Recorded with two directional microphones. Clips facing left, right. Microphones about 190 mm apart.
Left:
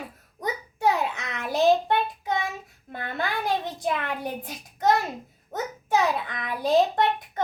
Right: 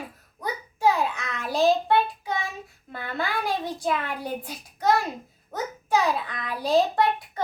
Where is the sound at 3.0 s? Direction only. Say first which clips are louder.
Even; 20° left (ahead or behind).